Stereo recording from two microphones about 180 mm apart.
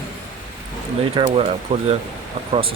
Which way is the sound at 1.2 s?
25° right (ahead or behind).